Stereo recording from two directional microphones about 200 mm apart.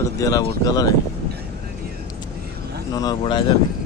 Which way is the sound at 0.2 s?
15° left (ahead or behind).